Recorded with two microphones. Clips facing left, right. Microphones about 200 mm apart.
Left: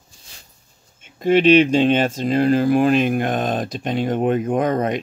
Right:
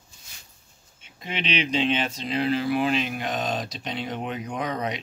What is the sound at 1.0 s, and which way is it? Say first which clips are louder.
Speech: left 17 dB; 50° left (ahead or behind).